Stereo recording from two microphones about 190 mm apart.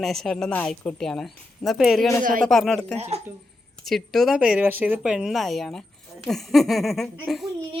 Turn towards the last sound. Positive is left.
turn(degrees=0)  # may be behind; listen again after turning